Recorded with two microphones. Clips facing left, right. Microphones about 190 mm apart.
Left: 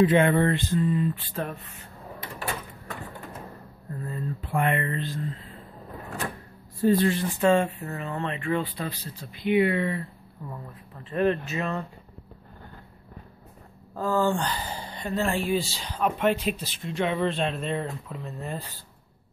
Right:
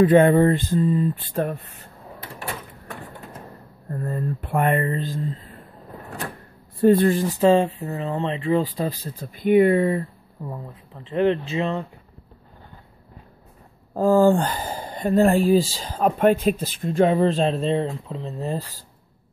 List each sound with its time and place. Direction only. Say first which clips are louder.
0.0 s speech: right 6 dB; 40° right (ahead or behind)
3.9 s a sound: right 6 dB; 45° right (ahead or behind)
4.8 s speech: right 5 dB; 35° right (ahead or behind)
6.8 s speech: right 6 dB; 55° right (ahead or behind); by 7.7 s 30° right (ahead or behind)
7.8 s speech: right 6 dB; 20° right (ahead or behind)
8.1 s speech: right 6 dB; 30° right (ahead or behind)
9.0 s speech: right 6 dB; 50° right (ahead or behind)
11.1 s speech: right 4 dB; 25° right (ahead or behind)
13.9 s speech: right 8 dB; 45° right (ahead or behind)